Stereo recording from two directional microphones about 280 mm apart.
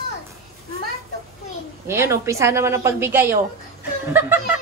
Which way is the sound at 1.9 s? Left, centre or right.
Centre.